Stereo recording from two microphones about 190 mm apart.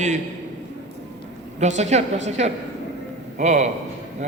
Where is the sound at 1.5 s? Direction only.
35° right (ahead or behind).